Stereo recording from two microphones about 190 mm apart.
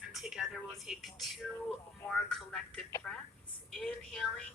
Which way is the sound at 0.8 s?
Centre (ahead or behind).